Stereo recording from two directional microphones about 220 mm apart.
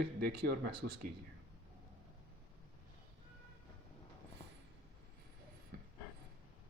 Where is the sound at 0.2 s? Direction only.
45° right (ahead or behind).